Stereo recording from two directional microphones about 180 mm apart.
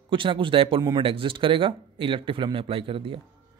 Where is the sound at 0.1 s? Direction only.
30° right (ahead or behind).